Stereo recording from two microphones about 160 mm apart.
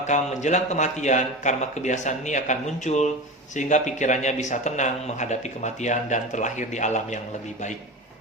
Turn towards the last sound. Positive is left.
turn(degrees=45)  # may be behind; listen again after turning